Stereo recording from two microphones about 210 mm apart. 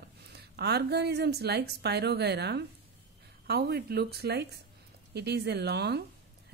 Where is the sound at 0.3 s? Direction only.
50° right (ahead or behind).